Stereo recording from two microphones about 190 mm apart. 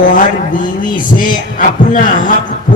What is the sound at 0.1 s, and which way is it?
A man's voice, 45° left (ahead or behind).